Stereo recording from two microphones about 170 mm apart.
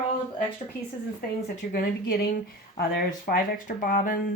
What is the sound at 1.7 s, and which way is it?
Speech, 60° left (ahead or behind).